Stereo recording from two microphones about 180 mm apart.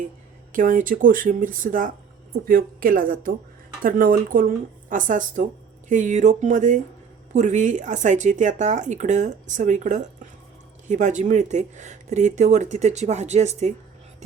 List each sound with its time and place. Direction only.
0.5 s speech: 50° right (ahead or behind)